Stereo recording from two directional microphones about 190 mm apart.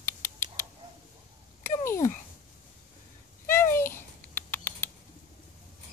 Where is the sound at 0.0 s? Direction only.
15° left (ahead or behind).